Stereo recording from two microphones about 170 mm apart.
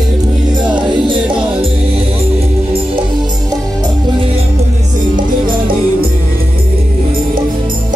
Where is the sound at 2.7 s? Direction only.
30° right (ahead or behind).